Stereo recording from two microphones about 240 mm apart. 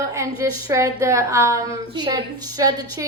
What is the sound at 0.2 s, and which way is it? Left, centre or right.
A woman's voice, centre.